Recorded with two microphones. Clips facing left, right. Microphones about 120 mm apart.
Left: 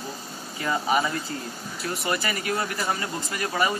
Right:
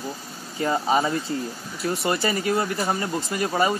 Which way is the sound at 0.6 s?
25° right (ahead or behind).